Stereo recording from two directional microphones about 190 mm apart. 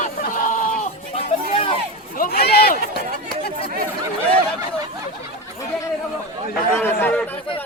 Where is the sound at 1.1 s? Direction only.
30° left (ahead or behind).